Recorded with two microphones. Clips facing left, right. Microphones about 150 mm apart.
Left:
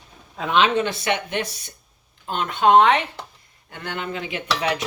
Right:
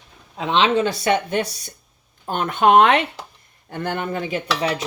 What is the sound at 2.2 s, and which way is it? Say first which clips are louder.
Speech: right 2 dB; 50° right (ahead or behind).